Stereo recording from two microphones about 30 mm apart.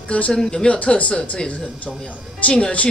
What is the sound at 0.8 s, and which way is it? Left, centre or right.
Speech, left.